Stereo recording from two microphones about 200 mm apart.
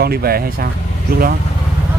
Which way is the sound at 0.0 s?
50° right (ahead or behind).